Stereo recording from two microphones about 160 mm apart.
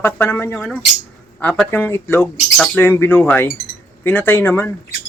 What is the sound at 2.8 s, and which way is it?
Speech, 15° left (ahead or behind).